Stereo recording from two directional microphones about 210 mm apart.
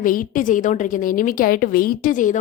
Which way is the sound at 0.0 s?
40° left (ahead or behind).